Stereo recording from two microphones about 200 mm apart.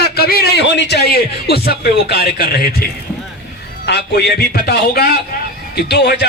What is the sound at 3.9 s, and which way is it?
A man's voice, 55° left (ahead or behind).